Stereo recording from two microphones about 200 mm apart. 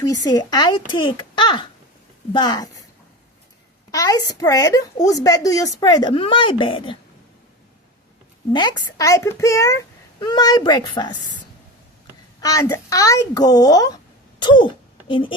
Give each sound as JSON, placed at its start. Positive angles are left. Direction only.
{"t": 0.3, "sound": "speech", "side_deg": 20}
{"t": 3.9, "sound": "a child's voice", "side_deg": 15}
{"t": 8.5, "sound": "a child's voice", "side_deg": 20}
{"t": 12.4, "sound": "a child's voice", "side_deg": 15}